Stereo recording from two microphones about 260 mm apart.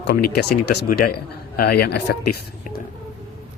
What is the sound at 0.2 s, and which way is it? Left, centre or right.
Speech, left.